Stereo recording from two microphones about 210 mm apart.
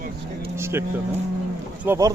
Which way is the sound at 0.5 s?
10° right (ahead or behind).